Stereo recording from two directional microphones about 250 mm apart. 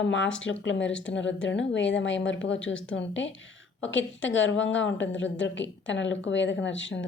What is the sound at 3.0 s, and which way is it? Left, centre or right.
Speech, left.